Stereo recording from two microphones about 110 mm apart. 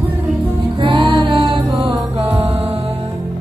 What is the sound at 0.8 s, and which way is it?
Music, 50° right (ahead or behind).